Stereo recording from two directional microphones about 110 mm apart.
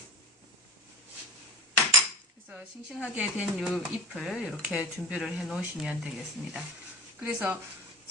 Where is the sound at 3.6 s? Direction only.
Centre (ahead or behind).